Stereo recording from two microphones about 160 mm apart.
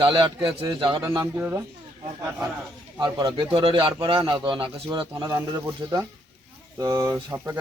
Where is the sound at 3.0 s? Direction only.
30° right (ahead or behind).